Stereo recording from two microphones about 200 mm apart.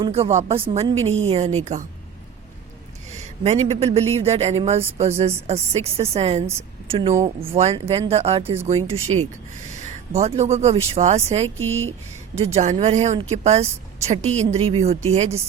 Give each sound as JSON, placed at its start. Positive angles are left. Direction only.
{"t": 0.0, "sound": "a woman's voice", "side_deg": -30}
{"t": 3.1, "sound": "a woman's voice", "side_deg": -35}
{"t": 9.7, "sound": "a sound", "side_deg": -35}
{"t": 10.2, "sound": "a woman's voice", "side_deg": -30}
{"t": 11.5, "sound": "speech", "side_deg": -85}
{"t": 12.5, "sound": "a woman's voice", "side_deg": -35}